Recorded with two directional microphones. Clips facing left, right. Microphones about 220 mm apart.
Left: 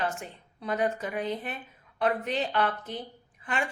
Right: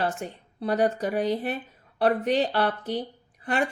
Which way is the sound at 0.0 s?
35° right (ahead or behind).